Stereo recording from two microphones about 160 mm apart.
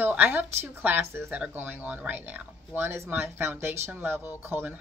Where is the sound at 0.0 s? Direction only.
10° right (ahead or behind).